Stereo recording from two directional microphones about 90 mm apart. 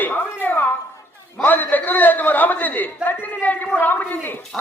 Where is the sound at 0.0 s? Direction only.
20° left (ahead or behind).